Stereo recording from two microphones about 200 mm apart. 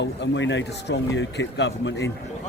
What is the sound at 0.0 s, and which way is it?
Speech, 65° left (ahead or behind).